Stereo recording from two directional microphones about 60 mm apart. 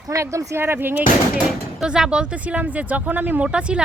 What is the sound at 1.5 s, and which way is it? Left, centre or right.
Speech, centre.